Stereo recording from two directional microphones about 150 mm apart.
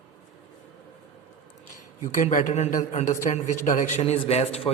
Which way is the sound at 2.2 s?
60° left (ahead or behind).